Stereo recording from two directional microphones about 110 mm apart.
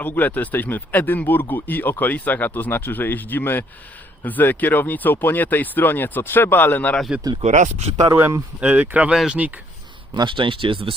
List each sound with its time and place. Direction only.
0.0 s speech: 15° left (ahead or behind)
7.4 s speech: 90° right
8.1 s speech: 25° right (ahead or behind)
8.6 s speech: 15° right (ahead or behind)
10.2 s speech: 50° right (ahead or behind)